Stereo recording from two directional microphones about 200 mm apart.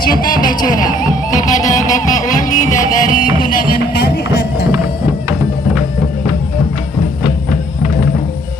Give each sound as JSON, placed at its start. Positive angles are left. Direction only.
{"t": 0.0, "sound": "speech", "side_deg": 45}
{"t": 0.4, "sound": "music", "side_deg": 40}